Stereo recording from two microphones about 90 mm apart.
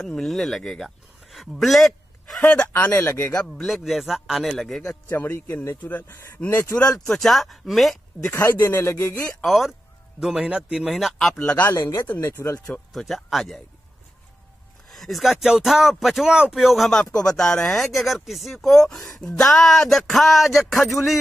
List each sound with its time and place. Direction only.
0.0 s a man's voice: 5° left (ahead or behind)
2.4 s speech: 15° left (ahead or behind)
2.7 s speech: 25° left (ahead or behind)
3.4 s speech: 5° left (ahead or behind)
5.1 s speech: 25° left (ahead or behind)
6.8 s speech: 10° left (ahead or behind)
8.2 s speech: 25° left (ahead or behind)
9.4 s speech: centre (ahead or behind)
11.4 s speech: 15° left (ahead or behind)
11.7 s speech: 25° left (ahead or behind)
12.5 s speech: 15° left (ahead or behind)
12.9 s speech: centre (ahead or behind)
14.9 s speech: centre (ahead or behind)